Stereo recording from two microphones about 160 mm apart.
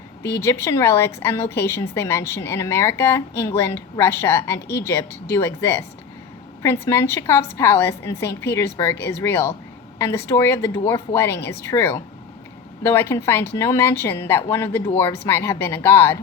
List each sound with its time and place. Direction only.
0.2 s a woman's voice: 15° left (ahead or behind)